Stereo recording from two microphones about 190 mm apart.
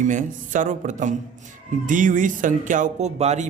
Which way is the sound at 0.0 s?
40° right (ahead or behind).